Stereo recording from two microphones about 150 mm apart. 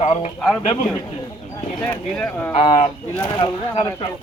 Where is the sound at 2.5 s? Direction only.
40° left (ahead or behind).